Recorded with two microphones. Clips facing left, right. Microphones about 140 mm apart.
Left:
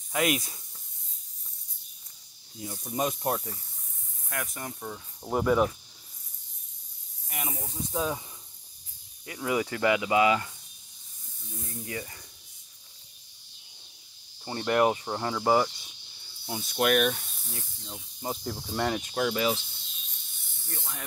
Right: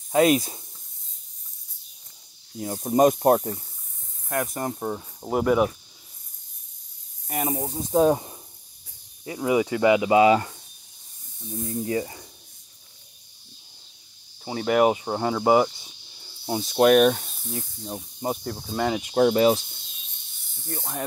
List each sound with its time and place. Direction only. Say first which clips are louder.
0.1 s speech: right 9 dB; 30° right (ahead or behind)
2.6 s speech: right 12 dB; 50° right (ahead or behind)
5.3 s speech: right 3 dB; 5° right (ahead or behind)
7.2 s speech: right 10 dB; 40° right (ahead or behind)
9.2 s speech: right 6 dB; 25° right (ahead or behind)
11.5 s speech: right 11 dB; 30° right (ahead or behind)
14.4 s speech: right 4 dB; 5° right (ahead or behind)
15.0 s speech: right 5 dB; 25° right (ahead or behind)
17.5 s speech: right 10 dB; 20° right (ahead or behind)
18.7 s speech: right 4 dB; 5° right (ahead or behind)
19.1 s speech: right 11 dB; 35° right (ahead or behind)